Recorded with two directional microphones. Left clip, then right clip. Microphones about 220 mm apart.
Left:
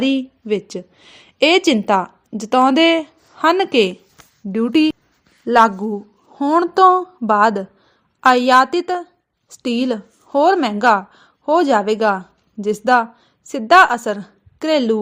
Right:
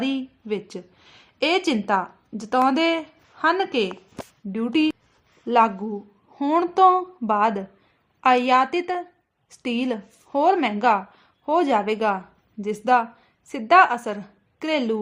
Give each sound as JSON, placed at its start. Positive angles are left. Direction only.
{"t": 0.0, "sound": "a woman's voice", "side_deg": 25}